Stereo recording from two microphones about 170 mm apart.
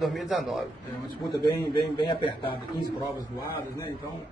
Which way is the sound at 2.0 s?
25° left (ahead or behind).